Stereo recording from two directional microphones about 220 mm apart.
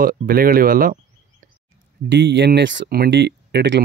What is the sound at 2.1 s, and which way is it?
Speech, 50° right (ahead or behind).